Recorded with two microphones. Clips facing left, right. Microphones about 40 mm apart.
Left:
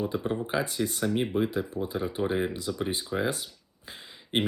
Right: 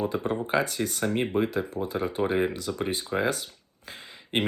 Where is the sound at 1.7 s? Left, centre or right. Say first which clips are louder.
Right 1 dB; right.